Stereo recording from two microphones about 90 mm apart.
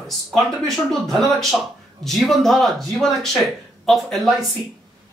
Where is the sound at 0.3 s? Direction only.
5° left (ahead or behind).